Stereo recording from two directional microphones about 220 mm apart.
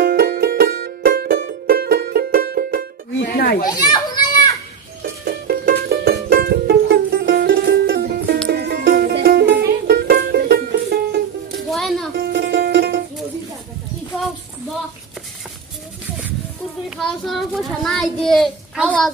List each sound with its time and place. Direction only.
0.0 s music: 45° right (ahead or behind)
3.2 s goat: 40° left (ahead or behind)
3.7 s children playing: 20° left (ahead or behind)
5.2 s music: 45° right (ahead or behind)
11.7 s music: centre (ahead or behind)
12.2 s music: 50° right (ahead or behind)
16.9 s child singing: centre (ahead or behind)